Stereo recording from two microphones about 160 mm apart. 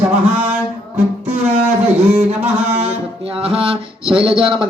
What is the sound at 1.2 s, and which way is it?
Music, 40° right (ahead or behind).